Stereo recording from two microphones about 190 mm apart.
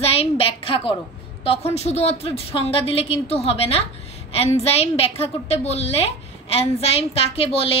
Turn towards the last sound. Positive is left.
turn(degrees=30)  # may be behind; listen again after turning